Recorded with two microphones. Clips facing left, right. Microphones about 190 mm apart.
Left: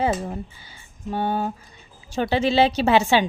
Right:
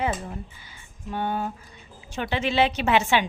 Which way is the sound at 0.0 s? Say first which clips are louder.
Left 5 dB; 35° left (ahead or behind).